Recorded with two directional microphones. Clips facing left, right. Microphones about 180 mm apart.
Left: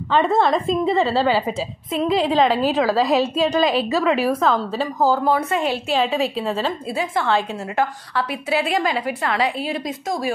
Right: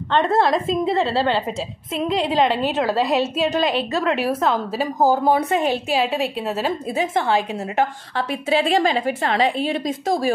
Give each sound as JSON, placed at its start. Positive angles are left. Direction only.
{"t": 0.1, "sound": "a woman's voice", "side_deg": 0}
{"t": 5.0, "sound": "a woman's voice", "side_deg": -15}
{"t": 6.0, "sound": "a woman's voice", "side_deg": 0}
{"t": 6.9, "sound": "a woman's voice", "side_deg": -20}